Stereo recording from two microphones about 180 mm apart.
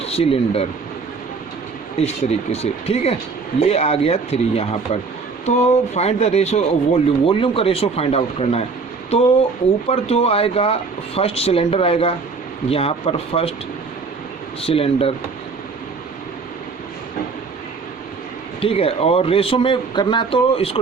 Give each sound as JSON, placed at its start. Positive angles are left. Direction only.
{"t": 0.0, "sound": "speech", "side_deg": 35}
{"t": 2.0, "sound": "speech", "side_deg": 35}
{"t": 9.9, "sound": "speech", "side_deg": 35}
{"t": 14.6, "sound": "speech", "side_deg": 30}
{"t": 18.6, "sound": "speech", "side_deg": 30}